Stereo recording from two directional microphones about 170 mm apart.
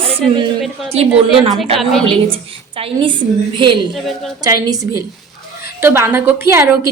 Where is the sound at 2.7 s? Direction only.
30° right (ahead or behind).